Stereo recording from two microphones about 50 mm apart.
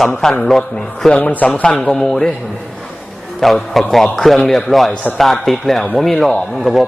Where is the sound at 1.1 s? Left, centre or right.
Left; by 2.3 s centre.